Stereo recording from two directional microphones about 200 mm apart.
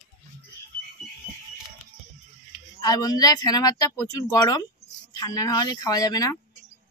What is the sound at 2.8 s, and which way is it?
Speech, 20° left (ahead or behind).